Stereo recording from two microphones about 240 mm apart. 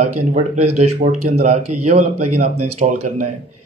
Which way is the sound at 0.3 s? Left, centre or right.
Right.